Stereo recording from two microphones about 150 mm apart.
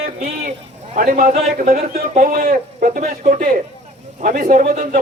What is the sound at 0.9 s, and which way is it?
A man's voice, 65° right (ahead or behind).